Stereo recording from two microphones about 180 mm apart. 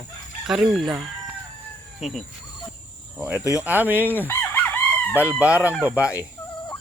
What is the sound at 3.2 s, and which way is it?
Speech, 10° right (ahead or behind).